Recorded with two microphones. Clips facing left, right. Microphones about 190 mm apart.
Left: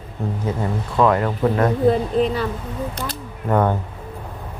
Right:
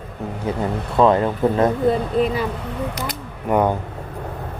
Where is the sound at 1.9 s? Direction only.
5° right (ahead or behind).